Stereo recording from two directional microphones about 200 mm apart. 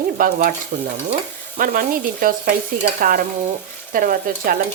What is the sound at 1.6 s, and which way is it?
Speech, 45° right (ahead or behind).